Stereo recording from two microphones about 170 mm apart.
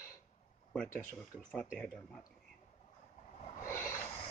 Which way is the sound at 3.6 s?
15° left (ahead or behind).